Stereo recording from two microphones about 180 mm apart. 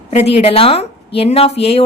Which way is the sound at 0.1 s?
35° left (ahead or behind).